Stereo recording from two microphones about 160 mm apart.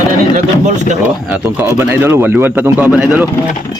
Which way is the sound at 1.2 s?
10° right (ahead or behind).